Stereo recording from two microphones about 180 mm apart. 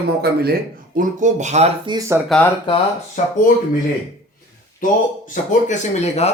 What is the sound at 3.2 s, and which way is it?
Speech, 45° left (ahead or behind).